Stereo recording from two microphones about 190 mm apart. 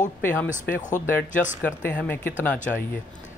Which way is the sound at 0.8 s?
40° left (ahead or behind).